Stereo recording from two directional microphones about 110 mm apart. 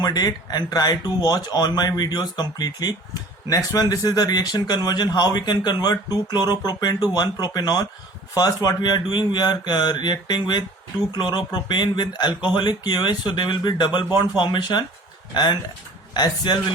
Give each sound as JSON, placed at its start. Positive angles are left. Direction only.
{"t": 0.0, "sound": "speech", "side_deg": 40}